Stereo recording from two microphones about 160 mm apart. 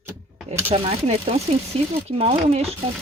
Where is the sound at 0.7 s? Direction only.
40° right (ahead or behind).